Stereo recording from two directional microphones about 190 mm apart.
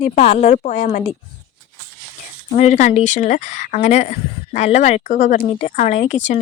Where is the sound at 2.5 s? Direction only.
35° left (ahead or behind).